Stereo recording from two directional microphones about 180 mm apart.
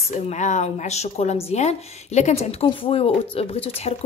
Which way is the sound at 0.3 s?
40° left (ahead or behind).